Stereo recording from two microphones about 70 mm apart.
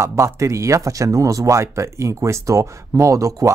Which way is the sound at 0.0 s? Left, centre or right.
Right.